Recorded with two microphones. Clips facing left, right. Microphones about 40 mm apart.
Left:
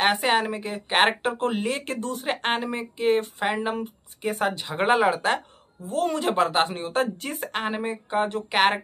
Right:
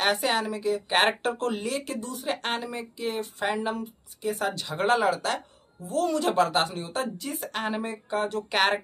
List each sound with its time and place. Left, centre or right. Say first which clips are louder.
0.0 s speech: left 3 dB; left
0.9 s speech: left 4 dB; left
2.4 s speech: left 5 dB; left
4.5 s speech: left 2 dB; left
5.9 s speech: left 1 dB; left
7.6 s speech: left 2 dB; centre
8.5 s speech: left 3 dB; centre